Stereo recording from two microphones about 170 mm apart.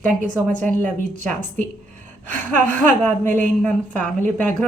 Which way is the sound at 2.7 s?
10° left (ahead or behind).